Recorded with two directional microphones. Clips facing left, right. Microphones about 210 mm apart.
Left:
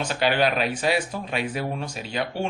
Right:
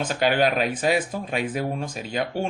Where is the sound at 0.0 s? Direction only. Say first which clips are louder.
Right 1 dB; 45° right (ahead or behind).